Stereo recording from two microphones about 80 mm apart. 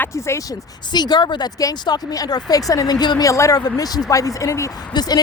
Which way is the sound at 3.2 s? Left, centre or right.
Left.